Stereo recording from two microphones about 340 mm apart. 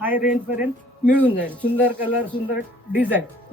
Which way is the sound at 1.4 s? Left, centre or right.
Centre.